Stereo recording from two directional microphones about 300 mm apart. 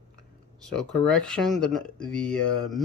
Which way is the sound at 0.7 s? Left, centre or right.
Centre.